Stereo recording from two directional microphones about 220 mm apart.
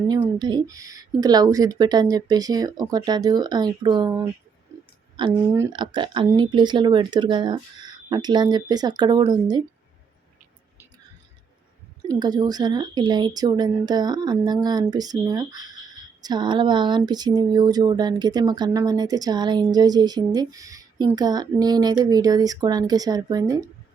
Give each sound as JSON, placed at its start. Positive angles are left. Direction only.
{"t": 0.1, "sound": "a woman's voice", "side_deg": -20}
{"t": 12.0, "sound": "a woman's voice", "side_deg": -20}